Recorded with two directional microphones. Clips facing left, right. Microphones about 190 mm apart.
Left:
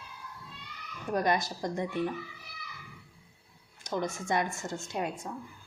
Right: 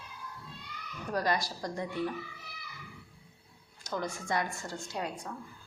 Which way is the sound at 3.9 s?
20° left (ahead or behind).